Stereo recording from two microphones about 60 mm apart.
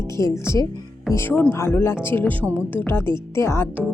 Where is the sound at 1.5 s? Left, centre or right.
Left.